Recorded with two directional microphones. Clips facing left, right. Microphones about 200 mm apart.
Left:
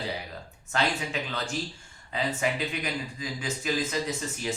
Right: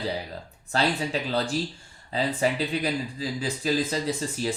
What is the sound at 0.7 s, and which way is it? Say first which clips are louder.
Speech: right 3 dB; 35° right (ahead or behind).